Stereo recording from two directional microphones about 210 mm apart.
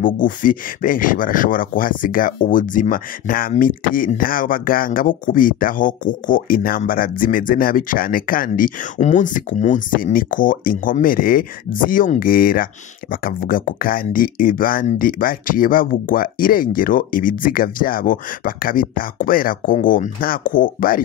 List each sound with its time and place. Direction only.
0.0 s speech: 40° left (ahead or behind)